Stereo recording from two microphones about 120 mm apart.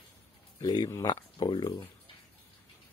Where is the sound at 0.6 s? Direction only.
35° left (ahead or behind).